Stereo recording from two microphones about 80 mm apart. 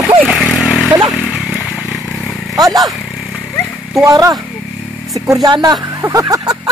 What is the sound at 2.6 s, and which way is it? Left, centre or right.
Speech, right.